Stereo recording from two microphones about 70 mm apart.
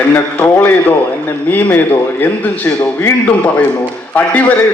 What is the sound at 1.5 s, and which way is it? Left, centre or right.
A man's voice, left.